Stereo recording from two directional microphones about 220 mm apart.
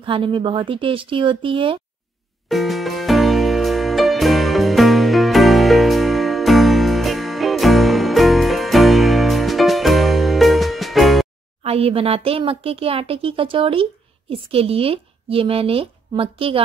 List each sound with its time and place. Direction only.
0.0 s speech: 25° right (ahead or behind)
2.4 s music: centre (ahead or behind)
11.6 s speech: 25° right (ahead or behind)